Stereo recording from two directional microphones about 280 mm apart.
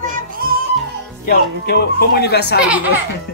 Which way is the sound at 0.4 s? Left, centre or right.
Right.